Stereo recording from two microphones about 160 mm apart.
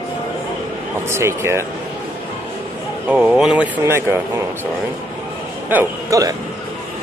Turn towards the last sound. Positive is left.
turn(degrees=-20)  # may be behind; listen again after turning